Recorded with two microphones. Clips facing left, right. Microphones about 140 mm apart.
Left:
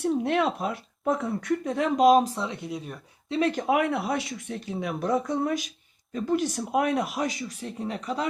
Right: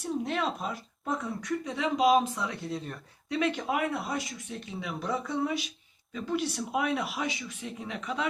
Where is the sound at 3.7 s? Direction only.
65° left (ahead or behind).